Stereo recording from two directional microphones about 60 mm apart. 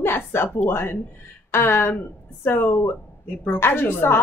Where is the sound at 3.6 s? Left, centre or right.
Left.